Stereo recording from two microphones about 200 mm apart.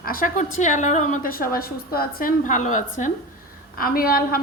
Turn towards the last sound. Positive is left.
turn(degrees=45)  # may be behind; listen again after turning